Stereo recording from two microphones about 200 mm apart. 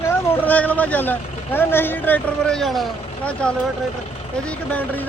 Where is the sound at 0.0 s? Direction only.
10° left (ahead or behind).